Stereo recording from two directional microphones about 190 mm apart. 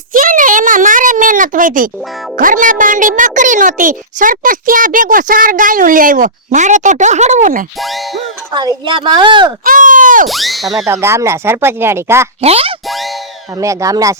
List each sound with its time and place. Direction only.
0.1 s a sound: 45° right (ahead or behind)
2.4 s a child's voice: 45° right (ahead or behind)
7.8 s speech: centre (ahead or behind)
8.5 s speech: 25° right (ahead or behind)
9.6 s a child's voice: 45° right (ahead or behind)
10.2 s speech: centre (ahead or behind)
10.8 s speech: 15° right (ahead or behind)
12.4 s speech: 30° right (ahead or behind)
13.6 s speech: 15° right (ahead or behind)